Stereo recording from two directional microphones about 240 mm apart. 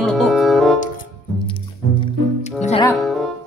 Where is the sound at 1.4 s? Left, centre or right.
Left.